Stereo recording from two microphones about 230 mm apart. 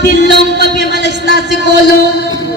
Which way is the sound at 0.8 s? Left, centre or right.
Right.